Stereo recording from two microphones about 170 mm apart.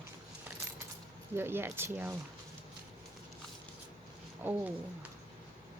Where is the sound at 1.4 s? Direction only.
15° right (ahead or behind).